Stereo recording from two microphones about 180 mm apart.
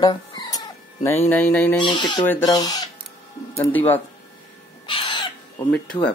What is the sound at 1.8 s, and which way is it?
Speech, 25° left (ahead or behind).